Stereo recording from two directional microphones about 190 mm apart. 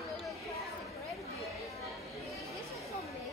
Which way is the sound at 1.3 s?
Centre (ahead or behind).